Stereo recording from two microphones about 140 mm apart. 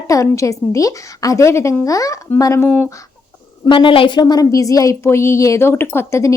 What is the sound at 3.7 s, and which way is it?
A woman's voice, 35° left (ahead or behind).